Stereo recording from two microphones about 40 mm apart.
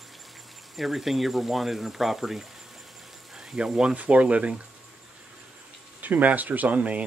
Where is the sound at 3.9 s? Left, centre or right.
Right.